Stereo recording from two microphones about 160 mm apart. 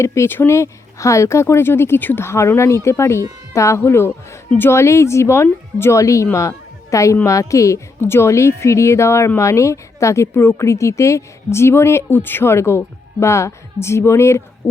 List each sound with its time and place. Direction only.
0.0 s a woman's voice: 15° left (ahead or behind)